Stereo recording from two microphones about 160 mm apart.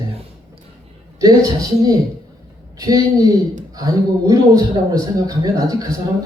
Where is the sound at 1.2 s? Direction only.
25° right (ahead or behind).